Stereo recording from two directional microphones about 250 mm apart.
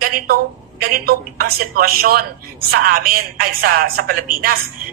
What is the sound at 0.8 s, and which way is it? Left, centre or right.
A woman's voice, right.